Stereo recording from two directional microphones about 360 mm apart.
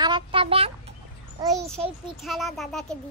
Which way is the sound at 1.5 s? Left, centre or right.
Centre.